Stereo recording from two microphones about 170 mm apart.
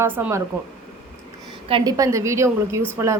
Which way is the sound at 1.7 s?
25° right (ahead or behind).